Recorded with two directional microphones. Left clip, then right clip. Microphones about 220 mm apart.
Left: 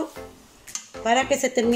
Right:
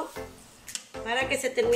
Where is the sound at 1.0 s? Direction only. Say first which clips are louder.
Left 7 dB; 30° left (ahead or behind).